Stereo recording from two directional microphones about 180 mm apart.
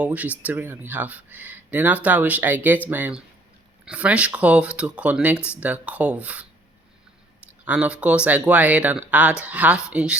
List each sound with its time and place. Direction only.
0.0 s speech: 10° right (ahead or behind)
7.6 s speech: 5° right (ahead or behind)